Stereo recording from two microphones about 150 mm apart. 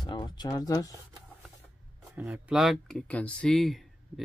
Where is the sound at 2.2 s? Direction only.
10° right (ahead or behind).